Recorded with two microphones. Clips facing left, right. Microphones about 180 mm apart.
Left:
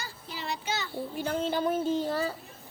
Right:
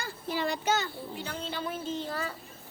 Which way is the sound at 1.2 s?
50° left (ahead or behind).